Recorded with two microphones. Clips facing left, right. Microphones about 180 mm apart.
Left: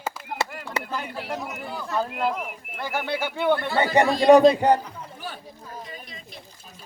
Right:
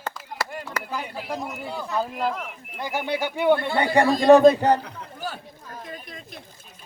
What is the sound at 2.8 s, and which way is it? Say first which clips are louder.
Speech: right 1 dB; 15° right (ahead or behind).